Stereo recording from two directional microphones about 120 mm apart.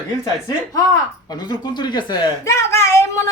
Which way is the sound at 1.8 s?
40° left (ahead or behind).